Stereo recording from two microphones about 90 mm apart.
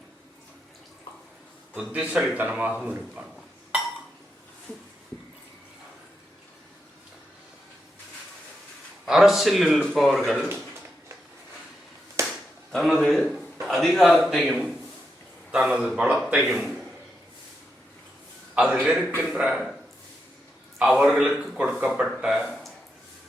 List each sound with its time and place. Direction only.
1.7 s a man's voice: 15° right (ahead or behind)
9.0 s speech: 5° right (ahead or behind)
12.2 s a sound: 30° right (ahead or behind)
12.7 s a man's voice: centre (ahead or behind)
18.5 s a man's voice: 10° right (ahead or behind)
20.7 s a man's voice: 5° right (ahead or behind)
22.4 s a sound: centre (ahead or behind)